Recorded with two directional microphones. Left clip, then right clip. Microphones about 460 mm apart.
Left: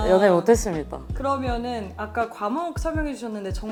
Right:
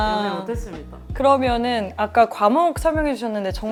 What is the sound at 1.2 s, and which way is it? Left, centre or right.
Speech, right.